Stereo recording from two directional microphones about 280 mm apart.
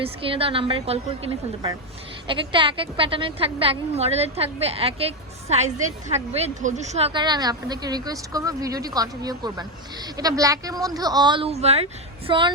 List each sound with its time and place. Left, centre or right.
0.2 s a woman's voice: centre